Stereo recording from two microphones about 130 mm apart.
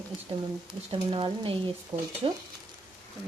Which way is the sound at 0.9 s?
40° right (ahead or behind).